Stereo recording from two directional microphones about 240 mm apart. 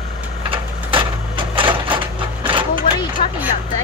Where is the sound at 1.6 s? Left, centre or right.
Right.